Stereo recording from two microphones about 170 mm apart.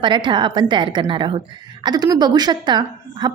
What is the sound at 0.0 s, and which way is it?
A woman's voice, 30° right (ahead or behind).